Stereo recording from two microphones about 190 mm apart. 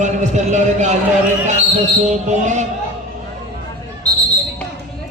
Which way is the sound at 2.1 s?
40° right (ahead or behind).